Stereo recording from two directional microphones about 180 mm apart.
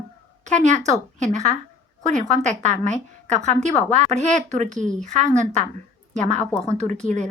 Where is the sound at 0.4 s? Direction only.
40° right (ahead or behind).